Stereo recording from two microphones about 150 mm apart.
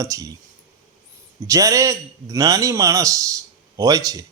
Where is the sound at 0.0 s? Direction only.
20° right (ahead or behind).